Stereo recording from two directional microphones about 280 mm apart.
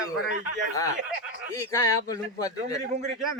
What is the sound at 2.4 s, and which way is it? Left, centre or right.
Speech, centre.